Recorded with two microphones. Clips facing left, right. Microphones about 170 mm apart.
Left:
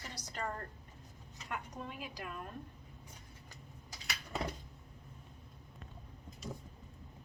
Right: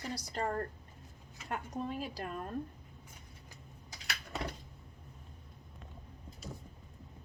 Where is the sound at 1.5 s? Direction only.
35° right (ahead or behind).